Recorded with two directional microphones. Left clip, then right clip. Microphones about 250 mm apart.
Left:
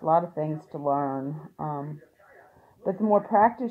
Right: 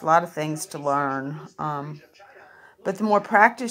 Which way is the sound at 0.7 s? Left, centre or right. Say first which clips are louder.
Right 3 dB; right.